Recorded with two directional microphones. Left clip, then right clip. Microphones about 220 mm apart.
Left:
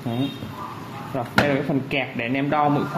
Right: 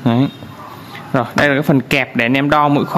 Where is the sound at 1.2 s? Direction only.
50° right (ahead or behind).